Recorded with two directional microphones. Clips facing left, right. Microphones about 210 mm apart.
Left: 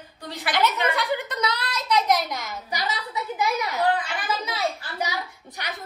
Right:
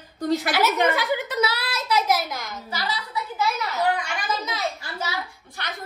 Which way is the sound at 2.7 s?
20° left (ahead or behind).